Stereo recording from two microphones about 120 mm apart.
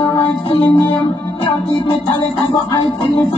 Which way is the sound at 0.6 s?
45° left (ahead or behind).